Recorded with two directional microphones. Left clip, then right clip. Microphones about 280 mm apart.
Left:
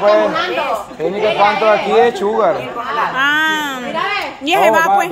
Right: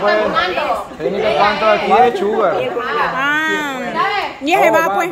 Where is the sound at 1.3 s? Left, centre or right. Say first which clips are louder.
Left 1 dB; left.